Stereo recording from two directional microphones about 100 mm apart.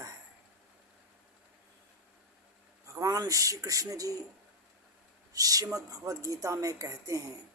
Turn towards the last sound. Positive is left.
turn(degrees=-35)  # may be behind; listen again after turning